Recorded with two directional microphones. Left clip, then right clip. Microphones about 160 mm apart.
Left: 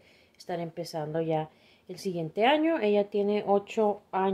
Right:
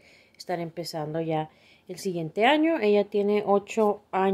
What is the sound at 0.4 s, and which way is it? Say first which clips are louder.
A woman's voice: right 3 dB; 30° right (ahead or behind).